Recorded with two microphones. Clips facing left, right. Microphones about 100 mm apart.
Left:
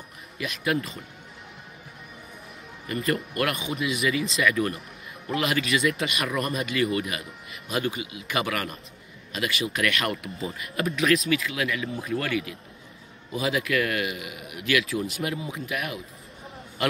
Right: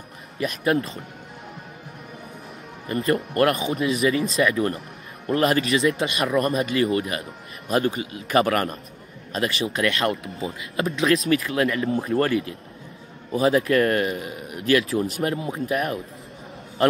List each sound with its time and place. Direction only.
0.4 s speech: 35° right (ahead or behind)
2.9 s speech: 30° right (ahead or behind)